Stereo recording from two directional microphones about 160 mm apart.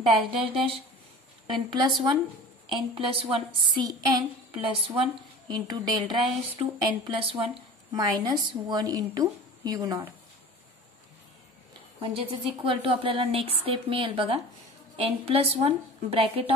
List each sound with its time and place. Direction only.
0.1 s a woman's voice: 35° right (ahead or behind)
12.0 s speech: 35° right (ahead or behind)